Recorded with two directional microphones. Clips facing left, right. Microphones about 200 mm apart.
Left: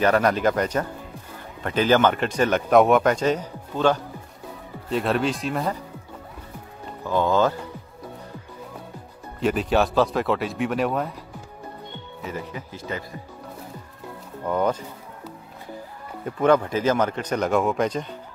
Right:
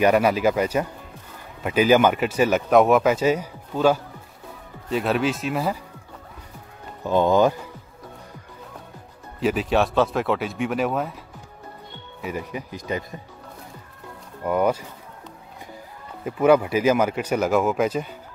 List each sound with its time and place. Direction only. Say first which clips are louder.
0.0 s a man's voice: right 2 dB; 10° right (ahead or behind)
7.1 s a man's voice: right 3 dB; 15° right (ahead or behind)
9.4 s a man's voice: even; centre (ahead or behind)
12.2 s a man's voice: right 3 dB; 15° right (ahead or behind)
14.4 s a man's voice: right 2 dB; 10° right (ahead or behind)
16.3 s a man's voice: right 2 dB; 10° right (ahead or behind)